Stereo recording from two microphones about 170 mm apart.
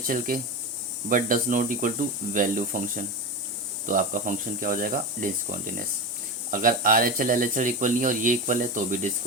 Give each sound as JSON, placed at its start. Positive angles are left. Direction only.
{"t": 0.3, "sound": "speech", "side_deg": -55}